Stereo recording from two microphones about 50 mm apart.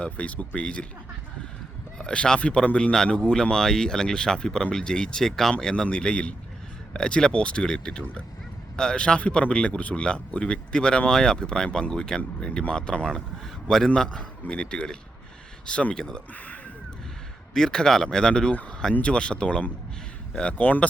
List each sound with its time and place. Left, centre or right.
0.0 s a man's voice: left
2.0 s a man's voice: centre
17.5 s a man's voice: centre
20.6 s speech: left